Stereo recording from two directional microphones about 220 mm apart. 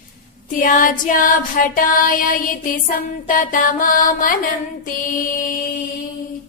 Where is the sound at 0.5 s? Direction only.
40° left (ahead or behind).